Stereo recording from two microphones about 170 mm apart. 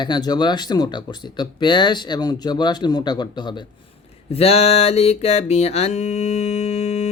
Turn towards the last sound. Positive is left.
turn(degrees=40)  # may be behind; listen again after turning